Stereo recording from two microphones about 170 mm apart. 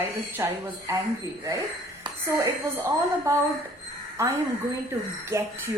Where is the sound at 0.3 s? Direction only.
15° right (ahead or behind).